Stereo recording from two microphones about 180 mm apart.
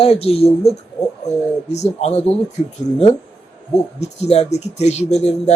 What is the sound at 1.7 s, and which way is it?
Speech, 40° left (ahead or behind).